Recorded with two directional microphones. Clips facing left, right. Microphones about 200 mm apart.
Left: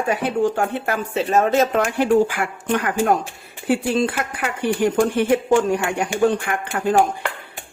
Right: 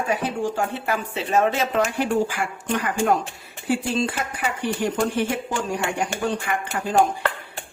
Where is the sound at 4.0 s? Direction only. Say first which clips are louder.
Left 3 dB; 55° left (ahead or behind).